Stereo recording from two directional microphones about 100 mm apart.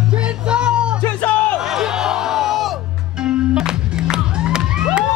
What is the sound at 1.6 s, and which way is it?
Music, 5° right (ahead or behind).